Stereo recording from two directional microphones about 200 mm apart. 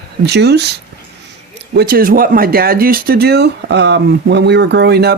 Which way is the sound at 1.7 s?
50° right (ahead or behind).